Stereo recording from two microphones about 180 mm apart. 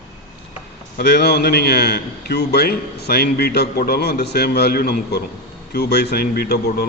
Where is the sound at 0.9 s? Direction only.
65° left (ahead or behind).